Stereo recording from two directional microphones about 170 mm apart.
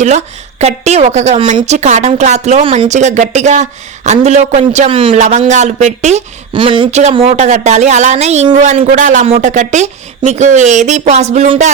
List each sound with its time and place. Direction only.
0.0 s speech: 40° right (ahead or behind)
6.5 s speech: 30° right (ahead or behind); by 11.7 s 45° right (ahead or behind)